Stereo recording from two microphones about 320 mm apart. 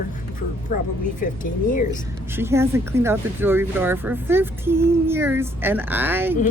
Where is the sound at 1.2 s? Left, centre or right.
Left.